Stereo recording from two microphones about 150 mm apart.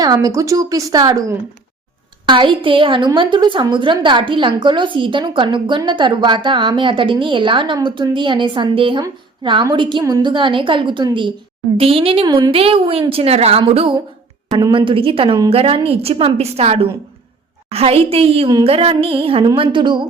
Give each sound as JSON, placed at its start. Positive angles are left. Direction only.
{"t": 0.0, "sound": "a woman's voice", "side_deg": -25}